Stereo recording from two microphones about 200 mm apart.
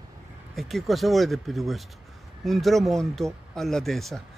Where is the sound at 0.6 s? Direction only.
Centre (ahead or behind).